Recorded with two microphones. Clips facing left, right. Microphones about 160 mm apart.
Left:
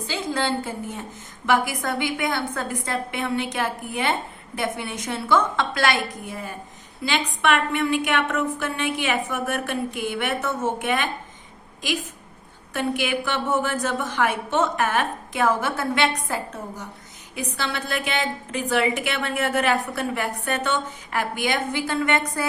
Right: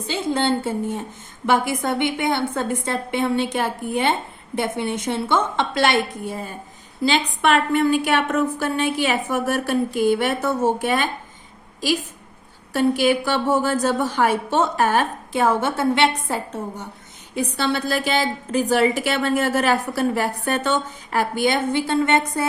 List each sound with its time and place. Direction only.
0.1 s a woman's voice: 25° right (ahead or behind)
12.7 s a woman's voice: 35° right (ahead or behind)